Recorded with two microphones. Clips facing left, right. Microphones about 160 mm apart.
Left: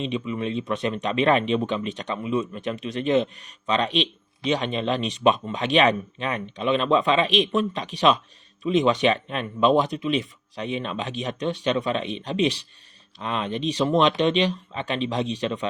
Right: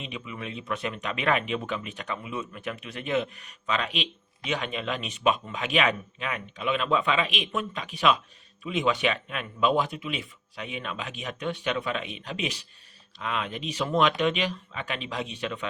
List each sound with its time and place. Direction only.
0.0 s speech: 30° left (ahead or behind)